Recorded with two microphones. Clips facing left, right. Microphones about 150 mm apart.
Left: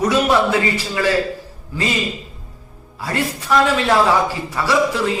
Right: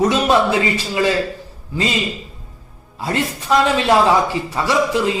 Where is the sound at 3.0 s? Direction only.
20° right (ahead or behind).